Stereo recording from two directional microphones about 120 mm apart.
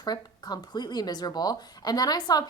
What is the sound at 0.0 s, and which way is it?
A woman's voice, 35° left (ahead or behind).